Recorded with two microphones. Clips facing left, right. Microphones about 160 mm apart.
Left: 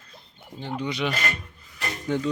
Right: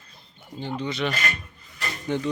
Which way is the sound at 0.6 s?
5° left (ahead or behind).